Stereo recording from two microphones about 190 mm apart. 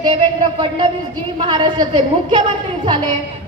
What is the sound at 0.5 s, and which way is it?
A woman's voice, 25° right (ahead or behind).